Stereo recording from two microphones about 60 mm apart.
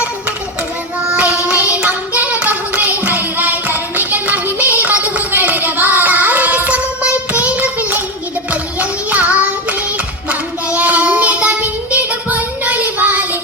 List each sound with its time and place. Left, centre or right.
1.1 s child singing: right
1.5 s clapping: right
8.8 s child singing: right
10.8 s child singing: right